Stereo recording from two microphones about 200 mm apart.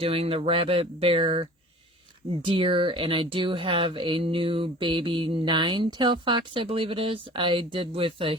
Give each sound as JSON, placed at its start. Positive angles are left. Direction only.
{"t": 0.0, "sound": "speech", "side_deg": -30}